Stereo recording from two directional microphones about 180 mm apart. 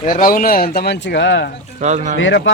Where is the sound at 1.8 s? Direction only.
40° right (ahead or behind).